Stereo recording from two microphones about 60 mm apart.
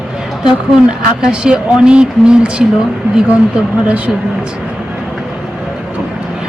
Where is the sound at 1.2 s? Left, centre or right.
Centre.